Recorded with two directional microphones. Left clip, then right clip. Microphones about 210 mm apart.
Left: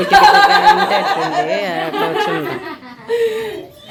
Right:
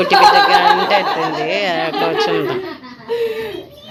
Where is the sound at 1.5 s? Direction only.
5° left (ahead or behind).